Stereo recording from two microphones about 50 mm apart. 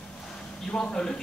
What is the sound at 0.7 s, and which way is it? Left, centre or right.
Speech, centre.